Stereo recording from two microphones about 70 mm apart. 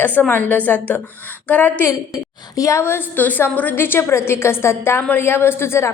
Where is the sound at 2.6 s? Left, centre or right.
Left.